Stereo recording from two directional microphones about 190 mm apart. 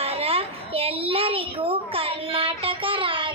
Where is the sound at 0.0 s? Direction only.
30° right (ahead or behind).